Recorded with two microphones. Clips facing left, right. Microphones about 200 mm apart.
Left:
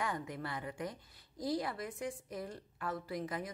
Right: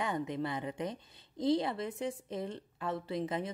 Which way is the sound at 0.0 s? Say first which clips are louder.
Right 5 dB; 20° right (ahead or behind).